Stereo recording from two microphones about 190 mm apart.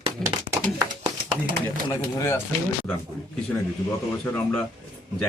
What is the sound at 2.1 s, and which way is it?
Speech, 15° left (ahead or behind).